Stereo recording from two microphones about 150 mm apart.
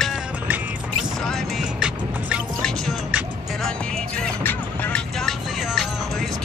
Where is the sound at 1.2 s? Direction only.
Centre (ahead or behind).